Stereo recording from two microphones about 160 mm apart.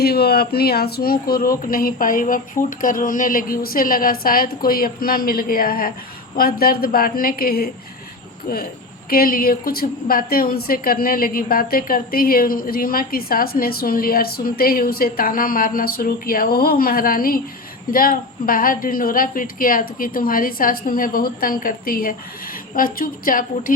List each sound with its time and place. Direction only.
0.0 s a woman's voice: 80° left
9.0 s a woman's voice: 65° left (ahead or behind)